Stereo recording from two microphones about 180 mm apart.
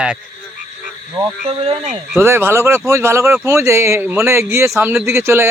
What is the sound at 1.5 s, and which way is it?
Speech, 30° right (ahead or behind).